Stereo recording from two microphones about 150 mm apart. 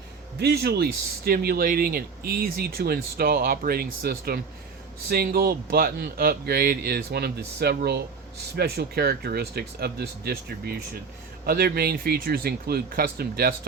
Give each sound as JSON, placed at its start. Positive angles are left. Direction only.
{"t": 0.3, "sound": "speech", "side_deg": -90}